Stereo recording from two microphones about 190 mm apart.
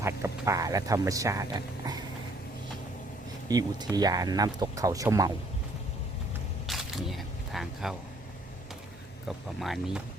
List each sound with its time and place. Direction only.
0.0 s speech: 15° right (ahead or behind)
3.5 s speech: 20° right (ahead or behind)
6.7 s single-lens reflex camera: centre (ahead or behind)
9.6 s speech: centre (ahead or behind)